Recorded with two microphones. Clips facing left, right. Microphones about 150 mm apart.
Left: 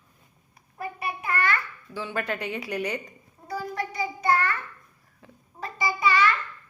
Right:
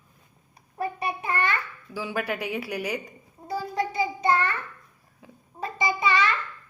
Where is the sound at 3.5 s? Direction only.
20° right (ahead or behind).